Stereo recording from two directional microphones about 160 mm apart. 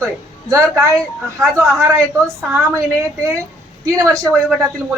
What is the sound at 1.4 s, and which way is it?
A man's voice, 20° right (ahead or behind).